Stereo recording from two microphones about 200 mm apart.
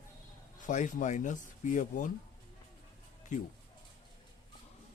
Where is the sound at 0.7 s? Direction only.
40° left (ahead or behind).